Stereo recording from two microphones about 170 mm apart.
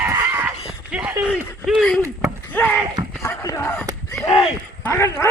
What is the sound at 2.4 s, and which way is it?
Basketball bounce, 10° left (ahead or behind).